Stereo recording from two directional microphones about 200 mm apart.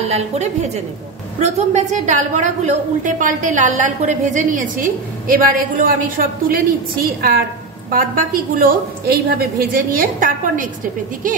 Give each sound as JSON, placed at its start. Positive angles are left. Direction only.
{"t": 0.1, "sound": "a woman's voice", "side_deg": -35}